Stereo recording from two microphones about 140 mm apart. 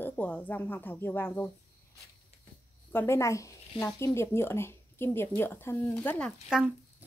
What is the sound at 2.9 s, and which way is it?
A woman's voice, 20° left (ahead or behind).